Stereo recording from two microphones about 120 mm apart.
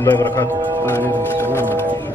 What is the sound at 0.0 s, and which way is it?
A man's voice, 20° left (ahead or behind).